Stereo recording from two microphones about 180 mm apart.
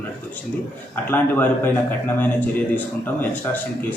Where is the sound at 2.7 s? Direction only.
10° left (ahead or behind).